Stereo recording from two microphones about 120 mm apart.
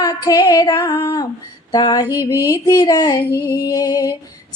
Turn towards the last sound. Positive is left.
turn(degrees=35)  # may be behind; listen again after turning